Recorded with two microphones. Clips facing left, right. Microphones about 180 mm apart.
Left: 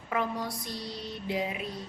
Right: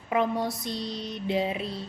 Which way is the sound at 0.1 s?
25° right (ahead or behind).